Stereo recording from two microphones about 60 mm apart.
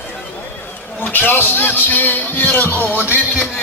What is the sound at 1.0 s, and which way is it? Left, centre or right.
Speech, left.